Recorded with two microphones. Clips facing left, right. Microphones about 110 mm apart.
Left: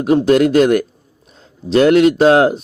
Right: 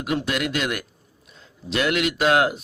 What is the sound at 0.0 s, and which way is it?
A man's voice, 35° left (ahead or behind).